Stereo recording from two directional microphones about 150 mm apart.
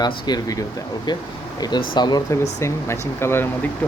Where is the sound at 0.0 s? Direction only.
25° left (ahead or behind).